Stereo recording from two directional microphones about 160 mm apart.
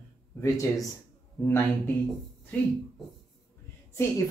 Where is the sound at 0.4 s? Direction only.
20° left (ahead or behind).